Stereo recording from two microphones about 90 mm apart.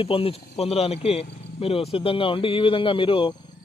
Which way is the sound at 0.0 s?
90° left.